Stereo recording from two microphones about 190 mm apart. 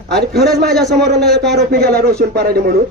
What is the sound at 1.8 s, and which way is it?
Speech, 55° right (ahead or behind).